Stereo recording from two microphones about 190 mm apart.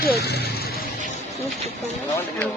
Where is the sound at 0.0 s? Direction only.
60° left (ahead or behind).